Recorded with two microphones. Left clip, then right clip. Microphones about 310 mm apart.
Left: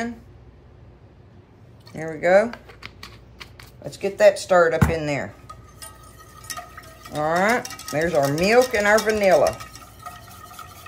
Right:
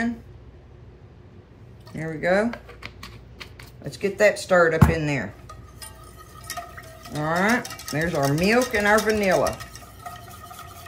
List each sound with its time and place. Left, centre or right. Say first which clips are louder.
2.0 s speech: left 5 dB; centre
2.5 s speech: right 1 dB; centre
7.2 s speech: left 2 dB; centre
9.6 s stir: left 1 dB; centre